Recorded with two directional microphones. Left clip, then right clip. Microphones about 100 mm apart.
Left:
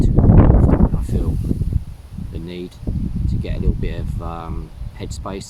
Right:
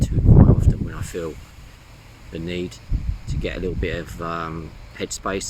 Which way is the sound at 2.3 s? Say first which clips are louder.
Right 3 dB; 25° left (ahead or behind).